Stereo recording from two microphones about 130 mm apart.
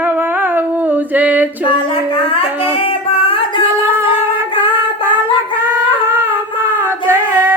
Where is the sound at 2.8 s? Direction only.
45° left (ahead or behind).